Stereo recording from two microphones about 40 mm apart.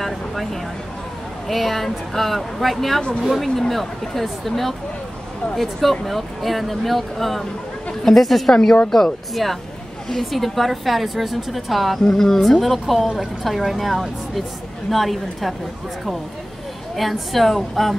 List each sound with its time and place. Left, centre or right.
0.0 s music: centre
1.5 s a woman's voice: centre
3.0 s speech: left
3.4 s a woman's voice: centre
8.5 s a woman's voice: centre
12.0 s a woman's voice: centre
16.9 s a woman's voice: centre